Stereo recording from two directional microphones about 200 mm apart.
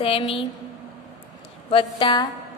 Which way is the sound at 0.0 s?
30° left (ahead or behind).